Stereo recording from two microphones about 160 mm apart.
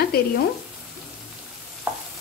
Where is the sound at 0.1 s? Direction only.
75° left (ahead or behind).